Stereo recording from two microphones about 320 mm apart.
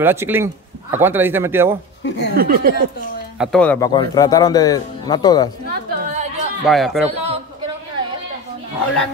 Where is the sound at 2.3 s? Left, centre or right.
Right.